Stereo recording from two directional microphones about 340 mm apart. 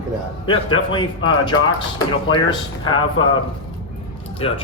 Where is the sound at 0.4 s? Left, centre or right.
Centre.